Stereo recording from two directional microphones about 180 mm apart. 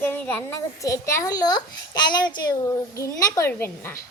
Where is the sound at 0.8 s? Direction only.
20° left (ahead or behind).